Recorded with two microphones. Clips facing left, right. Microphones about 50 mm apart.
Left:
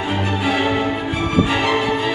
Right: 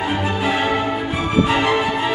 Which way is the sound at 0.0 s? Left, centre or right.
Centre.